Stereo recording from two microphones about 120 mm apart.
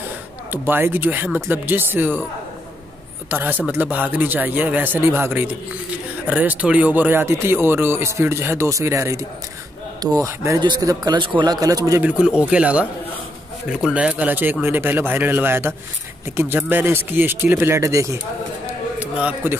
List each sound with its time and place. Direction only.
0.5 s speech: 15° right (ahead or behind)
3.3 s a man's voice: 15° right (ahead or behind)
12.0 s speech: 10° right (ahead or behind)
19.1 s speech: 10° right (ahead or behind)